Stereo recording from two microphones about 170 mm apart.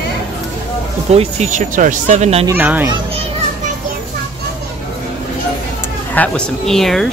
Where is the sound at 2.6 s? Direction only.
10° right (ahead or behind).